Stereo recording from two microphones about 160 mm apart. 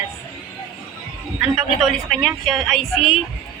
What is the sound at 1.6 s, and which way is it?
Speech, centre (ahead or behind).